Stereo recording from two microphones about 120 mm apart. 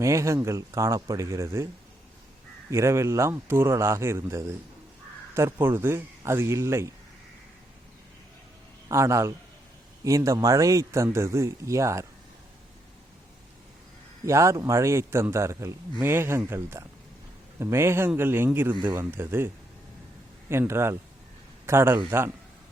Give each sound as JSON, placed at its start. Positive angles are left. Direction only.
{"t": 0.0, "sound": "a man's voice", "side_deg": -25}
{"t": 2.6, "sound": "a man's voice", "side_deg": -25}
{"t": 8.9, "sound": "a man's voice", "side_deg": -25}
{"t": 14.3, "sound": "a man's voice", "side_deg": -25}
{"t": 20.5, "sound": "a man's voice", "side_deg": -20}